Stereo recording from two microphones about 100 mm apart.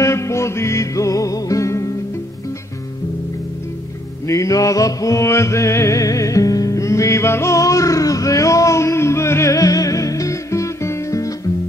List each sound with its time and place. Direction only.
0.0 s music: 30° left (ahead or behind)
4.3 s music: 35° left (ahead or behind)